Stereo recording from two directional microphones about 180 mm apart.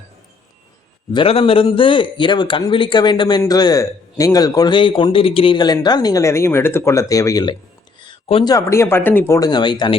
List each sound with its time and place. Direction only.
1.1 s a man's voice: 30° left (ahead or behind)
8.0 s a sound: 30° left (ahead or behind)
8.5 s speech: 15° left (ahead or behind)